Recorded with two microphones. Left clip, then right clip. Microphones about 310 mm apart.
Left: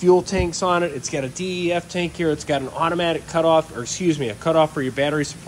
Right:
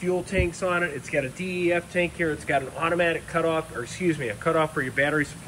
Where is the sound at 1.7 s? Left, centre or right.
Left.